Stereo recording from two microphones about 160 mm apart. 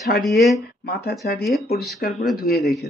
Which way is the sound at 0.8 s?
85° left.